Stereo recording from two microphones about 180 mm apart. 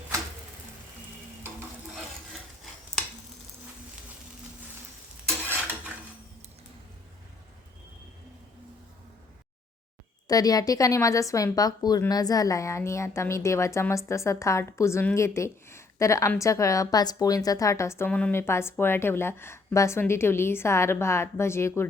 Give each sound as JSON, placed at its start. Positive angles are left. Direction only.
{"t": 10.2, "sound": "speech", "side_deg": 20}